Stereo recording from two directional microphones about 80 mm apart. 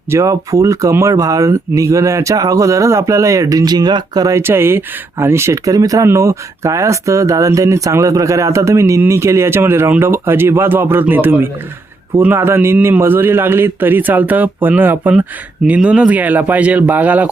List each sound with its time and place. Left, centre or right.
0.1 s speech: right
4.3 s a man's voice: right